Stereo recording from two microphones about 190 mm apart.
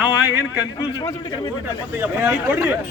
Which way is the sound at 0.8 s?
20° left (ahead or behind).